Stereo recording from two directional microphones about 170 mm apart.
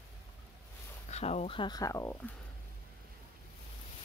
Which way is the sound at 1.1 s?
40° left (ahead or behind).